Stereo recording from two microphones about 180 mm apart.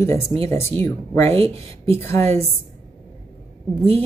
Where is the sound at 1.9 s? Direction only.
15° left (ahead or behind).